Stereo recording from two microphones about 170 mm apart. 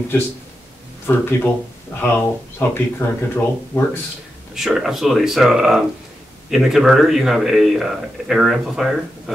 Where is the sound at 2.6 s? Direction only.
15° left (ahead or behind).